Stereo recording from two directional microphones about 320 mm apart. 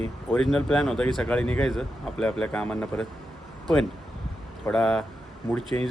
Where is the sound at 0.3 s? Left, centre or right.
Centre.